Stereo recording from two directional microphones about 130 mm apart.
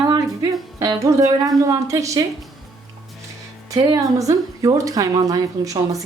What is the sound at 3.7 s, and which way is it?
Speech, 30° right (ahead or behind).